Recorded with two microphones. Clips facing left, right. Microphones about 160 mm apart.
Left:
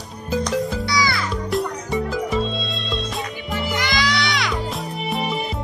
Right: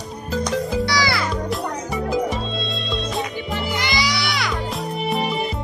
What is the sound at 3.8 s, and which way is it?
Music, 15° right (ahead or behind).